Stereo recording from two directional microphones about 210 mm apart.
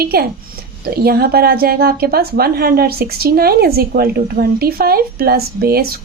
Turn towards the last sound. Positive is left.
turn(degrees=-45)  # may be behind; listen again after turning